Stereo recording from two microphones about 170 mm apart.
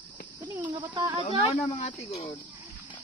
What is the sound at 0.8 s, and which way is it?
Speech, 20° right (ahead or behind).